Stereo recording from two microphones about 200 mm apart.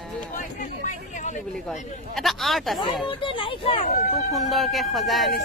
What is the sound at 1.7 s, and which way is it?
Speech, centre (ahead or behind).